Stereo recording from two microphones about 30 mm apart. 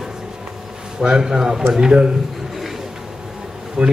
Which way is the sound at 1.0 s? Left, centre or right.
Right.